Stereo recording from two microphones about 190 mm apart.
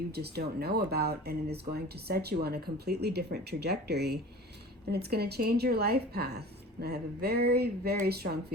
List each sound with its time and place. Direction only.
0.1 s speech: 55° right (ahead or behind)